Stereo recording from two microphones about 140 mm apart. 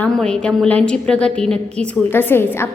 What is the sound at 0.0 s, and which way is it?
A woman's voice, 5° left (ahead or behind).